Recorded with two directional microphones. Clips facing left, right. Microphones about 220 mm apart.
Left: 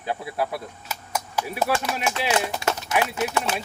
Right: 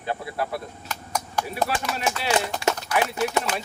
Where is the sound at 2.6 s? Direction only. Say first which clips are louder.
Right 2 dB; 20° left (ahead or behind).